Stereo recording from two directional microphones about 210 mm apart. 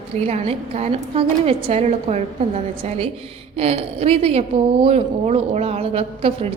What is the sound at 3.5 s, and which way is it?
A woman's voice, 30° right (ahead or behind).